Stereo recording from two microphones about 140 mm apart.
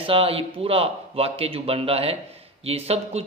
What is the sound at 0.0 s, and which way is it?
Speech, 40° right (ahead or behind).